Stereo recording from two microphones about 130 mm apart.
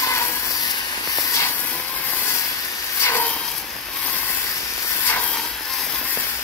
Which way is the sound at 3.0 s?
20° left (ahead or behind).